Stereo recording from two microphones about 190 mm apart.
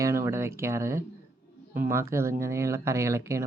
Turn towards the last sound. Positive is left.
turn(degrees=-15)  # may be behind; listen again after turning